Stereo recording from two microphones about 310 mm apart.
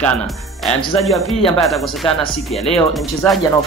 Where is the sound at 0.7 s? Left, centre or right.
Centre.